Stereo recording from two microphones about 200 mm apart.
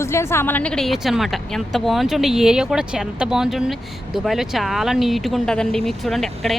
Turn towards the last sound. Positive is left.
turn(degrees=0)  # may be behind; listen again after turning